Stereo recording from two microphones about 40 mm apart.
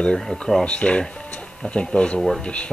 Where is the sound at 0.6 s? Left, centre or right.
Left.